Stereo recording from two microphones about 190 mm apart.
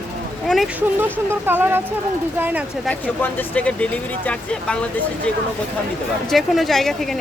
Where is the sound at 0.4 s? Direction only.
Centre (ahead or behind).